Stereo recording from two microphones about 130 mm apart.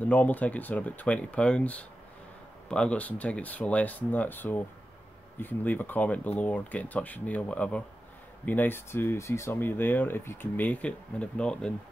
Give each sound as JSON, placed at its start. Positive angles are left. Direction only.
{"t": 0.0, "sound": "speech", "side_deg": 10}